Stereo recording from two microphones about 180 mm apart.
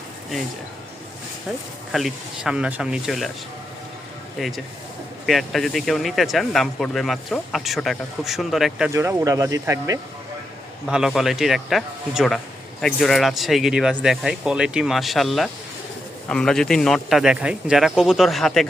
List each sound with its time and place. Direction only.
1.9 s speech: centre (ahead or behind)
4.4 s speech: centre (ahead or behind)
8.9 s speech: 15° right (ahead or behind)
10.8 s speech: 5° right (ahead or behind)